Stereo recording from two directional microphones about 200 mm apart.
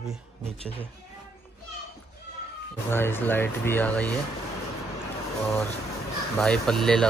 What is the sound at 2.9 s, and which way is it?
Speech, 10° left (ahead or behind).